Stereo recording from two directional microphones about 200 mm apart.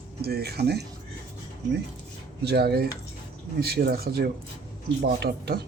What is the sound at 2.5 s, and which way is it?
Speech, 50° right (ahead or behind).